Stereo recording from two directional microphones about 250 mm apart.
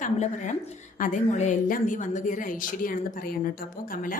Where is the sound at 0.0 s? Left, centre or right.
Left.